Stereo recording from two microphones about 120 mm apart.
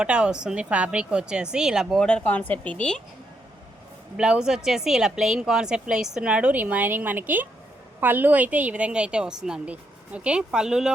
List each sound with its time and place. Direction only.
0.0 s a woman's voice: 5° right (ahead or behind)
2.0 s speech: 10° left (ahead or behind)
4.2 s a woman's voice: 5° right (ahead or behind)